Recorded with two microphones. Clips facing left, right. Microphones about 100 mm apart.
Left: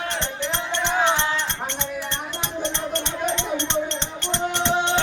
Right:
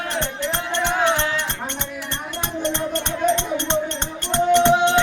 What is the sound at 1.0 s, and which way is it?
Music, centre (ahead or behind).